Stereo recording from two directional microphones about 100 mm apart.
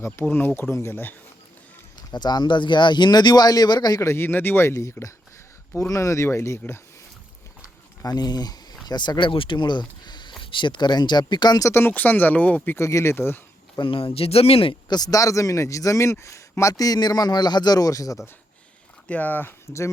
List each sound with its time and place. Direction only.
0.0 s speech: 25° left (ahead or behind)
2.0 s speech: 45° left (ahead or behind)
4.0 s speech: 25° left (ahead or behind)
8.0 s speech: 40° left (ahead or behind)
11.7 s speech: 20° left (ahead or behind)
13.7 s speech: 60° left (ahead or behind)
14.8 s a man's voice: 40° left (ahead or behind)
19.0 s speech: 15° left (ahead or behind)